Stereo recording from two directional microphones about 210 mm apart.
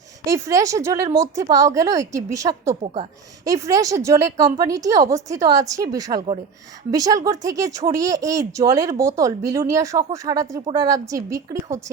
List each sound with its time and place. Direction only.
0.3 s a woman's voice: 15° right (ahead or behind)
2.8 s a woman's voice: 30° right (ahead or behind)
3.4 s a woman's voice: 15° right (ahead or behind)